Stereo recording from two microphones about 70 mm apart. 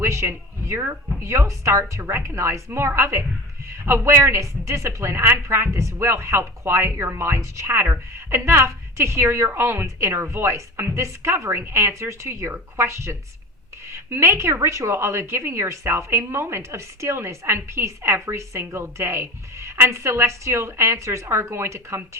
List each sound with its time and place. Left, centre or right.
0.0 s a woman's voice: right